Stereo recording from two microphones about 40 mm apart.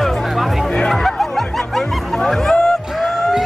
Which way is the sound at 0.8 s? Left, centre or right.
Centre.